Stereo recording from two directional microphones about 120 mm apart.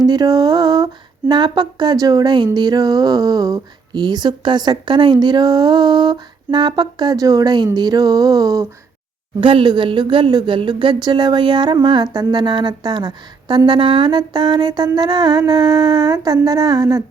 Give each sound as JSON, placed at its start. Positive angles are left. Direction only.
{"t": 0.0, "sound": "speech", "side_deg": -35}
{"t": 9.4, "sound": "speech", "side_deg": -45}